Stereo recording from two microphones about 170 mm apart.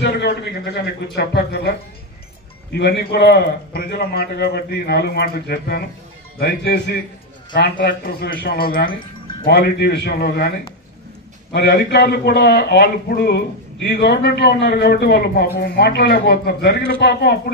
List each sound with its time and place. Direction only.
0.0 s a man's voice: 80° left; by 8.9 s 60° left (ahead or behind)
9.5 s a man's voice: 75° left (ahead or behind)